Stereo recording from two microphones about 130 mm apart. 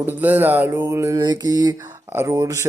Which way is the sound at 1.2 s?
35° right (ahead or behind).